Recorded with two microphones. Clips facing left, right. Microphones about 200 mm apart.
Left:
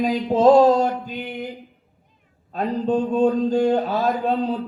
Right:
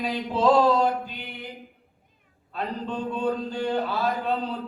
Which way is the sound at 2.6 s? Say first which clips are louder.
Left 9 dB; 45° left (ahead or behind).